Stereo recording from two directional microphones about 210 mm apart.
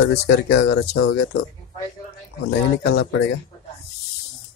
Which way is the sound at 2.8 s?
60° left (ahead or behind).